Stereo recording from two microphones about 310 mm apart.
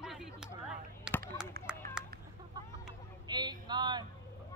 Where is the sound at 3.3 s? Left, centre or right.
Centre.